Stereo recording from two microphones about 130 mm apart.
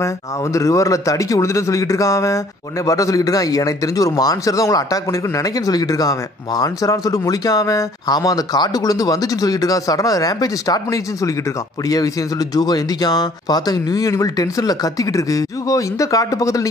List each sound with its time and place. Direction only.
0.0 s speech: 25° left (ahead or behind)